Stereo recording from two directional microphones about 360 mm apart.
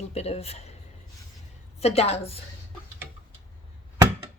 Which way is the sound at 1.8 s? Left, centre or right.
Centre.